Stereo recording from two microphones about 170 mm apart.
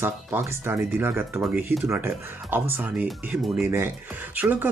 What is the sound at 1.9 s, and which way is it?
Speech, 15° right (ahead or behind).